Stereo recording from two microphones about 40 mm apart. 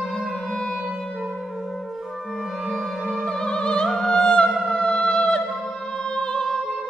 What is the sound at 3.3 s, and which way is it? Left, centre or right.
Music, centre.